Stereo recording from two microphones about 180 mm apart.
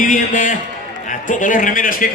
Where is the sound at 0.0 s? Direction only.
45° left (ahead or behind).